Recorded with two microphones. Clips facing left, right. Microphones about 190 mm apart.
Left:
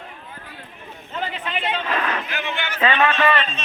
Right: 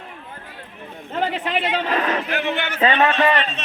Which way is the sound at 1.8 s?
35° right (ahead or behind).